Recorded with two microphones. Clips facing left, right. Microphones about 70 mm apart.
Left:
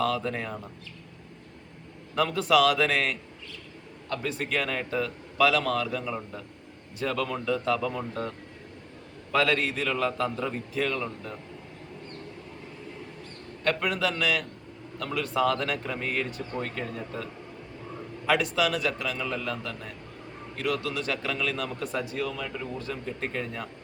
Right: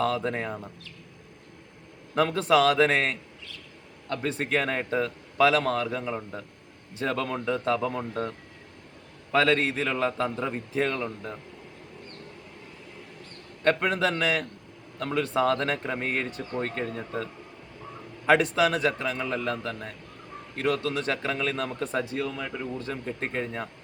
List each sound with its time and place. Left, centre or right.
0.0 s a man's voice: right
2.1 s a man's voice: right
9.3 s a man's voice: right
13.7 s a man's voice: right
18.3 s a man's voice: right